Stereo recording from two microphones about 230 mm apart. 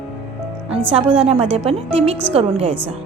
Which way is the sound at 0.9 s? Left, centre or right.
Right.